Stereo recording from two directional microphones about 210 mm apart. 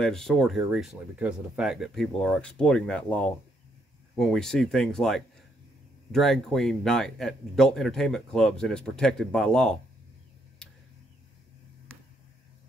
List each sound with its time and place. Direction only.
0.0 s speech: centre (ahead or behind)
4.2 s speech: centre (ahead or behind)